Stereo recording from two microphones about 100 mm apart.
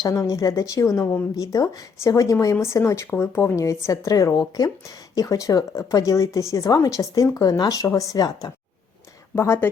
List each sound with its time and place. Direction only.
0.0 s speech: 35° left (ahead or behind)
9.3 s speech: 25° left (ahead or behind)